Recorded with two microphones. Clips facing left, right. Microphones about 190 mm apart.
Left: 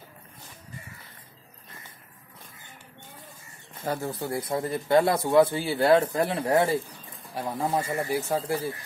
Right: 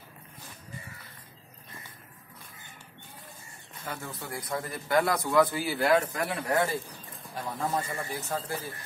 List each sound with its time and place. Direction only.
3.8 s a man's voice: 35° left (ahead or behind)